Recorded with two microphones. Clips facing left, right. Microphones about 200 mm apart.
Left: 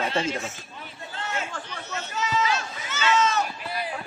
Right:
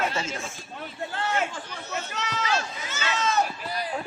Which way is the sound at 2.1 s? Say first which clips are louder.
Left 4 dB; 65° right (ahead or behind).